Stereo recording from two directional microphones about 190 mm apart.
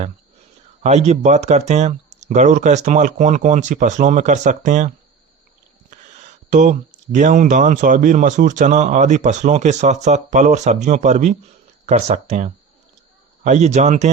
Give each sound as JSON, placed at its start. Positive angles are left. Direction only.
{"t": 0.8, "sound": "speech", "side_deg": -35}
{"t": 6.5, "sound": "speech", "side_deg": -40}